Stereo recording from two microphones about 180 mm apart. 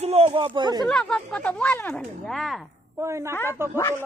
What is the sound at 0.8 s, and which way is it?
Speech, 5° left (ahead or behind).